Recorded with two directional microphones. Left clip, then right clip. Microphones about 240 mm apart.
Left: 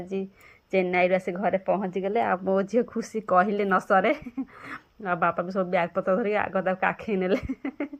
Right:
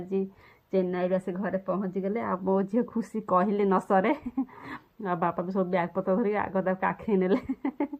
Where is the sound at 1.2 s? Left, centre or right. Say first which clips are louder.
Left 6 dB; left.